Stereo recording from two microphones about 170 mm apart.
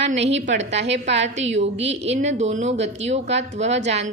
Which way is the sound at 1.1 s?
40° right (ahead or behind).